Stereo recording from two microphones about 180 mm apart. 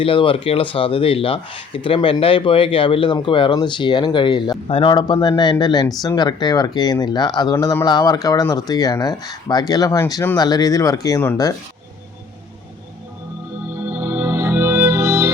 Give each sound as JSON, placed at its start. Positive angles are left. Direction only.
{"t": 0.0, "sound": "speech", "side_deg": 30}
{"t": 13.9, "sound": "music", "side_deg": -10}